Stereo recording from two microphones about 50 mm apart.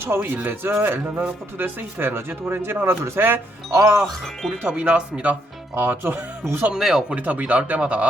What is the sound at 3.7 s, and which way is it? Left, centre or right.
Speech, right.